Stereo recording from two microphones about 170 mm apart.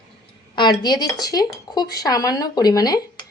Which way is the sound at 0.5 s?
25° left (ahead or behind).